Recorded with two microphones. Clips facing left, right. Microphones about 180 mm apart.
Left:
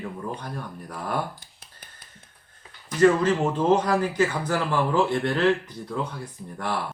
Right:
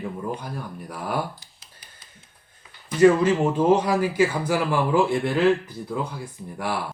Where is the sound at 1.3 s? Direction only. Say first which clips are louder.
Left 2 dB; 55° left (ahead or behind).